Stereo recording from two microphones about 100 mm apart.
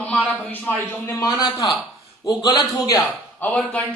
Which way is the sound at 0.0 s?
15° left (ahead or behind).